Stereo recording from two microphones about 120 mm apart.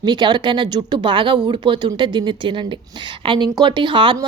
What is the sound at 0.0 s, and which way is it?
A woman's voice, 40° right (ahead or behind).